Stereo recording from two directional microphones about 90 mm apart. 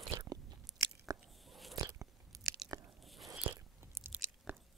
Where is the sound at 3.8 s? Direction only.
30° right (ahead or behind).